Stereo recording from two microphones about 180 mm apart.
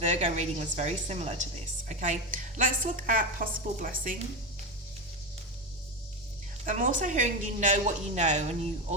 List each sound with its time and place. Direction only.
0.0 s a woman's voice: 40° right (ahead or behind)
6.7 s a woman's voice: 45° right (ahead or behind)